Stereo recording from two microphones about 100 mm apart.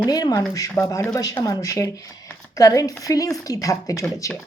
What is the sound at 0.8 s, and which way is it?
A woman's voice, 30° left (ahead or behind).